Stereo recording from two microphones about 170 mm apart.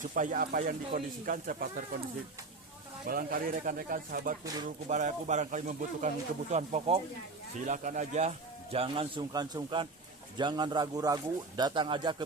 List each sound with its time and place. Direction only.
0.1 s speech: 55° right (ahead or behind)
3.1 s speech: 55° right (ahead or behind)
4.4 s speech: 25° right (ahead or behind)
4.9 s speech: 45° right (ahead or behind)
8.7 s speech: 35° right (ahead or behind)